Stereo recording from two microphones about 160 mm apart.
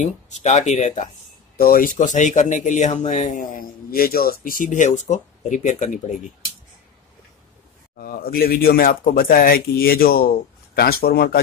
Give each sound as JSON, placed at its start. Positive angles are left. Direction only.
{"t": 0.0, "sound": "speech", "side_deg": 45}
{"t": 1.6, "sound": "speech", "side_deg": 60}
{"t": 8.0, "sound": "speech", "side_deg": 65}